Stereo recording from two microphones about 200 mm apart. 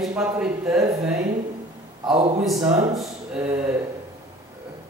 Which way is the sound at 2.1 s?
30° right (ahead or behind).